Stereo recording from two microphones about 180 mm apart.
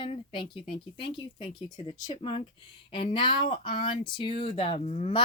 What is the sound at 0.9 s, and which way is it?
Speech, 30° left (ahead or behind).